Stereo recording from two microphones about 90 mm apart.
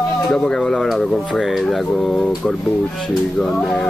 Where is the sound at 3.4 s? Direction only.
10° left (ahead or behind).